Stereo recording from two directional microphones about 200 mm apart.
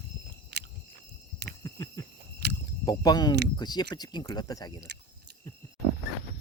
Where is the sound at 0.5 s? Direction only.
55° right (ahead or behind).